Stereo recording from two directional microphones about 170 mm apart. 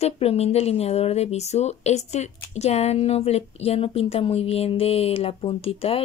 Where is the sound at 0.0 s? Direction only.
35° left (ahead or behind).